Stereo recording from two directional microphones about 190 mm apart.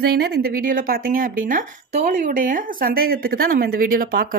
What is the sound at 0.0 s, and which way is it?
Speech, 55° right (ahead or behind).